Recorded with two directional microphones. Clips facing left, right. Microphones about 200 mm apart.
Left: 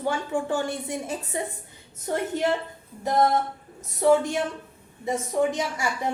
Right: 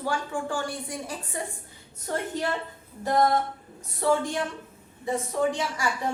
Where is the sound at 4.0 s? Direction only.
20° left (ahead or behind).